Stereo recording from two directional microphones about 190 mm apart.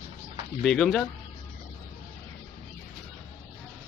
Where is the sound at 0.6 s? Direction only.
5° left (ahead or behind).